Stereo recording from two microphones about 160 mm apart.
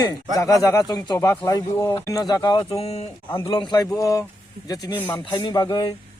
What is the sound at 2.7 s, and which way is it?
Speech, 40° left (ahead or behind).